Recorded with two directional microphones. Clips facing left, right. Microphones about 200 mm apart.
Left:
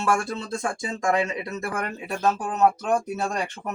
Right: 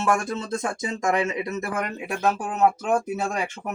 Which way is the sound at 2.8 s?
10° right (ahead or behind).